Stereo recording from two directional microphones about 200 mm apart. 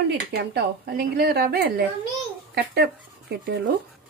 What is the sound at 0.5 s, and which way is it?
A woman's voice, 50° right (ahead or behind).